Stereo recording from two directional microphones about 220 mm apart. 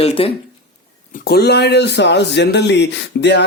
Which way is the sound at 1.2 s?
45° left (ahead or behind).